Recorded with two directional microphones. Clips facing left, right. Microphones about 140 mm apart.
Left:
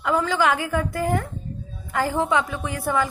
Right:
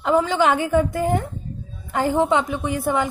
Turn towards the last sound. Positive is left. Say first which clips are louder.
# right 2 dB
turn(degrees=-20)  # may be behind; listen again after turning